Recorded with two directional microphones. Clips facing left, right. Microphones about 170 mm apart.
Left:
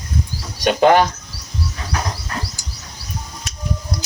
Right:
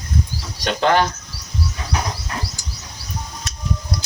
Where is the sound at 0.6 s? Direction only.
15° left (ahead or behind).